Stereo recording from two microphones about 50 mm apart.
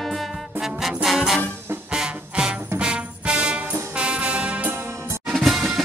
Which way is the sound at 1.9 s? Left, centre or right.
Centre.